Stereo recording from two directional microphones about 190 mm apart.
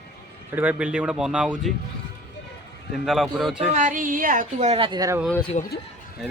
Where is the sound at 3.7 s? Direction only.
40° right (ahead or behind); by 5.1 s 20° right (ahead or behind).